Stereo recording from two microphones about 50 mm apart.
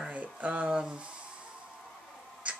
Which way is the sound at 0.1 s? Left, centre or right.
Right.